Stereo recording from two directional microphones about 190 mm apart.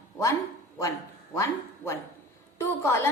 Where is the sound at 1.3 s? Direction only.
15° left (ahead or behind).